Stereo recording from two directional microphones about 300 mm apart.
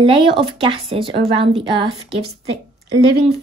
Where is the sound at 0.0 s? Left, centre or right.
Centre.